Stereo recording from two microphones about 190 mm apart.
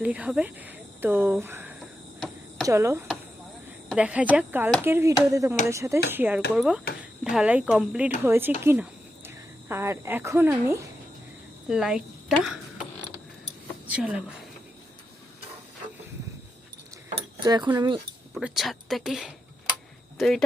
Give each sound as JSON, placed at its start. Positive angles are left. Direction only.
{"t": 0.0, "sound": "speech", "side_deg": -5}
{"t": 1.8, "sound": "a sound", "side_deg": 0}
{"t": 2.6, "sound": "a woman's voice", "side_deg": -15}
{"t": 13.8, "sound": "speech", "side_deg": -5}
{"t": 17.4, "sound": "speech", "side_deg": -20}
{"t": 18.3, "sound": "speech", "side_deg": 0}